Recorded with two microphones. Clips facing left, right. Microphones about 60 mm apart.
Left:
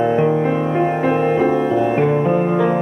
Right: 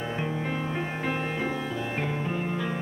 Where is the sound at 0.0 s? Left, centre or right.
Left.